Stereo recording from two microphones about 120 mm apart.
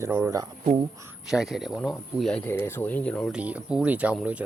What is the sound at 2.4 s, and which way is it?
Speech, 20° left (ahead or behind).